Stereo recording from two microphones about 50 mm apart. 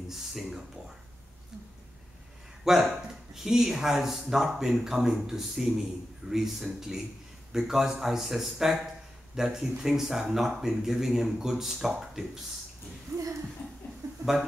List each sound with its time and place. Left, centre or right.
0.1 s speech: centre
2.6 s speech: centre
13.1 s a sound: right